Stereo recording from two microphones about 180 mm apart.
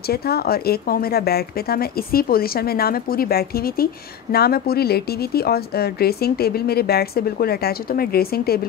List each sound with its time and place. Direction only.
0.1 s speech: 60° left (ahead or behind)